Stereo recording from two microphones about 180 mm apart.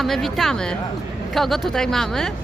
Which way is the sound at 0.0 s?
Centre (ahead or behind).